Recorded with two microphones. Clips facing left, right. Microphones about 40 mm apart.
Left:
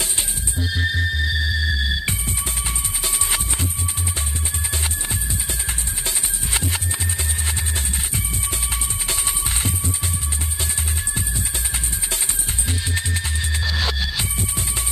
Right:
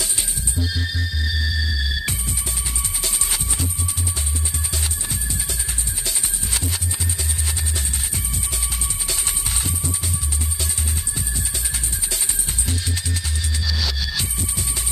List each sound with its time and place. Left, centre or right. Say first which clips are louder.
0.7 s music: left 8 dB; left
6.0 s music: left 1 dB; left
12.9 s music: left 3 dB; left